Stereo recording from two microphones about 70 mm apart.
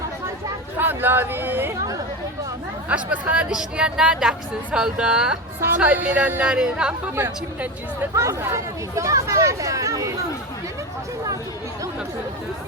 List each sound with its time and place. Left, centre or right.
0.8 s speech: right
2.9 s a woman's voice: centre
5.8 s a woman's voice: right
8.1 s speech: right